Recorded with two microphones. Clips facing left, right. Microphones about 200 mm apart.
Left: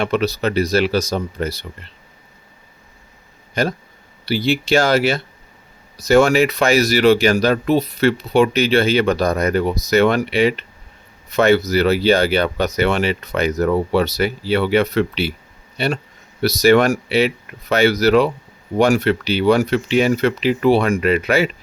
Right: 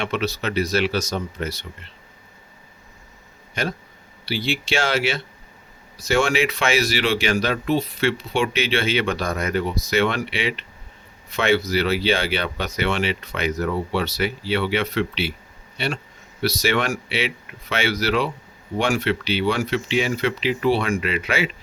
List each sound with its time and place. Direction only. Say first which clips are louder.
0.0 s speech: left 6 dB; 40° left (ahead or behind)
3.5 s speech: left 6 dB; 40° left (ahead or behind)